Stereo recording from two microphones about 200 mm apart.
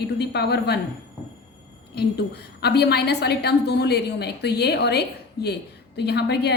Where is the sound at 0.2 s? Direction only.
55° left (ahead or behind).